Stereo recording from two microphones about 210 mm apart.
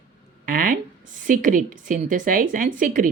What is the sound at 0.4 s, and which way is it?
Speech, 40° right (ahead or behind).